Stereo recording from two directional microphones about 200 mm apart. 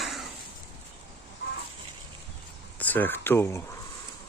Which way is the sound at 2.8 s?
10° left (ahead or behind).